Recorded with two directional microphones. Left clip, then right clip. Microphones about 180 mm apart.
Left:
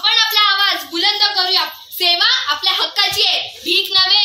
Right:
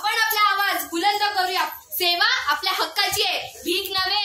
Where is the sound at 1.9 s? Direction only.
15° right (ahead or behind).